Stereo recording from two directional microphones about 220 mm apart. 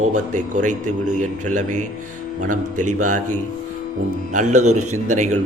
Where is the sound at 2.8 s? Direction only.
90° right.